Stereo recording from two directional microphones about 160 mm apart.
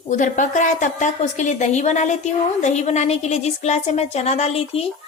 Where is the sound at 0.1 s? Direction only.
50° left (ahead or behind).